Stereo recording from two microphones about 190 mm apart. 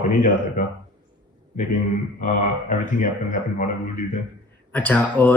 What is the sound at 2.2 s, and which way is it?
Speech, 40° left (ahead or behind).